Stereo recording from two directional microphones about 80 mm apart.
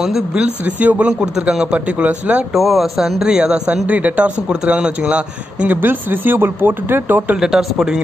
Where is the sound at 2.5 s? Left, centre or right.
Centre; by 7.4 s right.